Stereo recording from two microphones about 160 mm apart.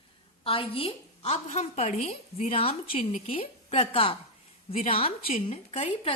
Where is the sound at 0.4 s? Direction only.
35° left (ahead or behind).